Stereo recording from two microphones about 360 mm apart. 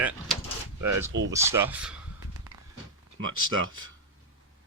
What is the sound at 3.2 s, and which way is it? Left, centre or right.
Speech, right.